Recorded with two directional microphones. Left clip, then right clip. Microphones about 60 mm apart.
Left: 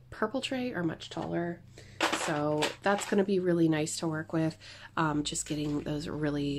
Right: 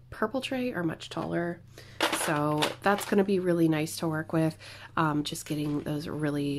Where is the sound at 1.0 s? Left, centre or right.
Right.